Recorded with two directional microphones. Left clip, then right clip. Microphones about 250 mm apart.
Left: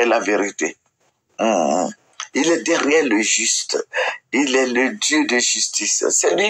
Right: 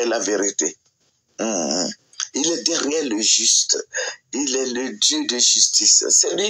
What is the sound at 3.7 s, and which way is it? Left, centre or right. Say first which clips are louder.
Speech: left 4 dB; left.